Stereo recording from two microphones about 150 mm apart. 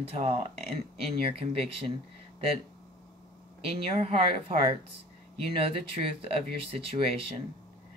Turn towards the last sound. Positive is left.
turn(degrees=-40)  # may be behind; listen again after turning